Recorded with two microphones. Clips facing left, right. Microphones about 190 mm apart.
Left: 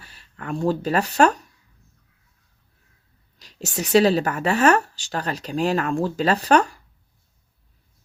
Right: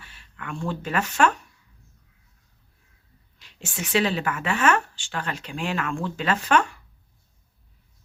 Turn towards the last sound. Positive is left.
turn(degrees=40)  # may be behind; listen again after turning